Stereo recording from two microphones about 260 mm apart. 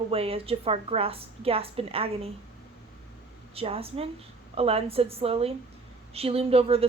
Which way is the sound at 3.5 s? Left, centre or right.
Right.